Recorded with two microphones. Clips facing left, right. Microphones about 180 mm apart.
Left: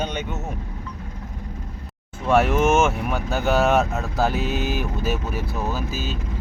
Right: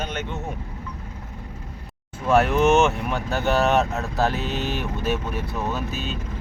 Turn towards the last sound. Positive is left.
turn(degrees=0)  # may be behind; listen again after turning